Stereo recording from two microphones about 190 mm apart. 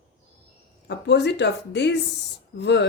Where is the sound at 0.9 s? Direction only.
65° left (ahead or behind).